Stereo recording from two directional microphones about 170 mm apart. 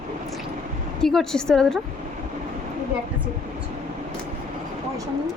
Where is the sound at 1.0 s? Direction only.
5° left (ahead or behind).